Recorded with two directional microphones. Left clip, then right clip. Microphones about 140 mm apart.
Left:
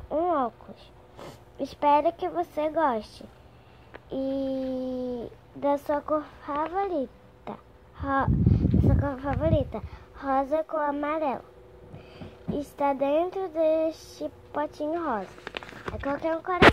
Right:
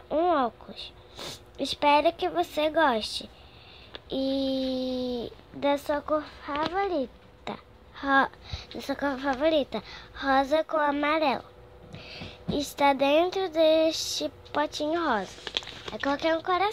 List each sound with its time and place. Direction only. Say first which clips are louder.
0.1 s a woman's voice: right 1 dB; 5° right (ahead or behind)
5.8 s speech: left 1 dB; 15° left (ahead or behind)
7.4 s a sound: right 2 dB; 5° right (ahead or behind)
9.0 s speech: right 2 dB; 10° right (ahead or behind)
16.2 s speech: right 3 dB; 5° right (ahead or behind)